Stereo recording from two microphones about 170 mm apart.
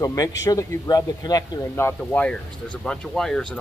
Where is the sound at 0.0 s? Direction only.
20° left (ahead or behind).